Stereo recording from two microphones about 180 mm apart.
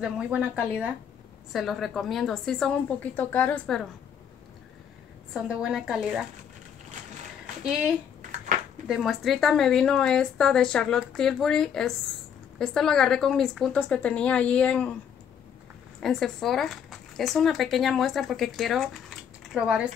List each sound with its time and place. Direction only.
0.0 s a woman's voice: 5° right (ahead or behind)
5.3 s a woman's voice: 5° right (ahead or behind)
8.8 s a woman's voice: centre (ahead or behind)
16.0 s speech: centre (ahead or behind)